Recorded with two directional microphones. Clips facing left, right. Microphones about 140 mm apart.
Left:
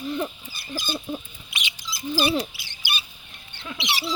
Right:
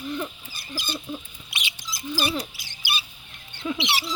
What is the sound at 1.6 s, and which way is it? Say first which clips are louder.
Rodents: left 2 dB; 40° right (ahead or behind).